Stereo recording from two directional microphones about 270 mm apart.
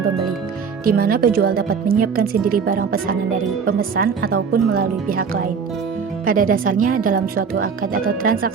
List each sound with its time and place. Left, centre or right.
0.9 s speech: right